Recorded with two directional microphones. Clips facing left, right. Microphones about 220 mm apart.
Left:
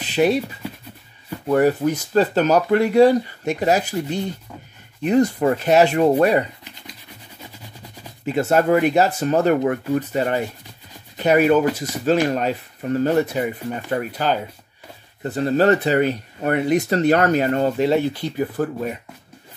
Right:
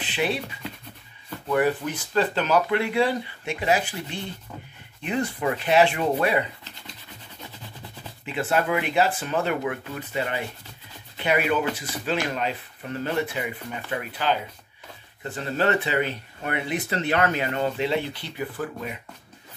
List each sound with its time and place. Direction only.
0.0 s writing: 40° left (ahead or behind)
1.5 s speech: 40° left (ahead or behind)
8.3 s speech: 40° left (ahead or behind)